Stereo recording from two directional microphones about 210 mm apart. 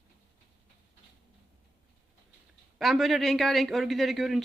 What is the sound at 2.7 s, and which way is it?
Speech, centre (ahead or behind).